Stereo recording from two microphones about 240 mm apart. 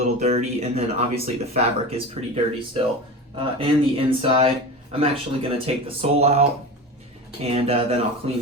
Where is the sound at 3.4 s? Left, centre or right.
Right.